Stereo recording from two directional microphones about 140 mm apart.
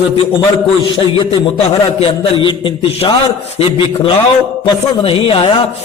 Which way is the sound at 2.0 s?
35° left (ahead or behind).